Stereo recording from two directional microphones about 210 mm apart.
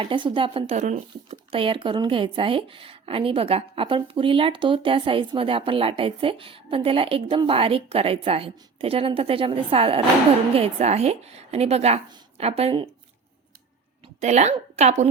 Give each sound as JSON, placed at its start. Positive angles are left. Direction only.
{"t": 0.0, "sound": "speech", "side_deg": -25}
{"t": 14.2, "sound": "a woman's voice", "side_deg": -30}